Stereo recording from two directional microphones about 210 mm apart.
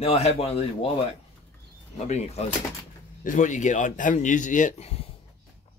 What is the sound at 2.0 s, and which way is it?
A man's voice, 30° left (ahead or behind).